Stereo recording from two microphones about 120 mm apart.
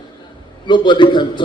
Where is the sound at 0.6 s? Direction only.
40° left (ahead or behind).